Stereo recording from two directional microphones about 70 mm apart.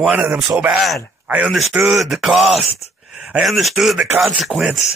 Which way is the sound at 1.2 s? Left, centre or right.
Right.